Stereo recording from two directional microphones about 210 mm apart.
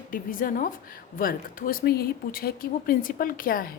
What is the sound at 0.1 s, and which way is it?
A woman's voice, 40° left (ahead or behind).